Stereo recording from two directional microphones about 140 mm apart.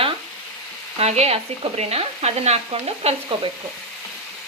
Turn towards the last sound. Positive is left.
turn(degrees=-40)  # may be behind; listen again after turning